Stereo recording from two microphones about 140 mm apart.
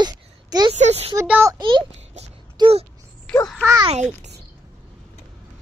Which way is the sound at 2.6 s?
45° right (ahead or behind).